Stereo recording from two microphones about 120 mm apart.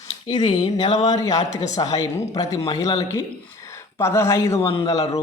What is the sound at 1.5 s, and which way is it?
Speech, 80° left.